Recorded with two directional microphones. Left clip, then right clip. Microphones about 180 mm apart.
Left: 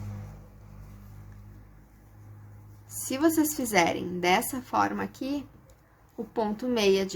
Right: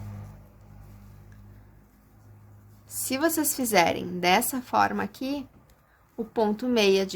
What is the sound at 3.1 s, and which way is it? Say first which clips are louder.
A woman's voice: left 1 dB; 30° right (ahead or behind).